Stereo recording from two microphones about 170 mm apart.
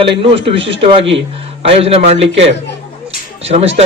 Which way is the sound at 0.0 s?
30° right (ahead or behind).